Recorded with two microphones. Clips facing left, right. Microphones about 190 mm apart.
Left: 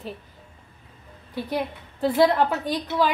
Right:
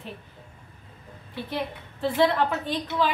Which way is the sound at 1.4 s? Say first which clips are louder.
Left 3 dB; 40° left (ahead or behind).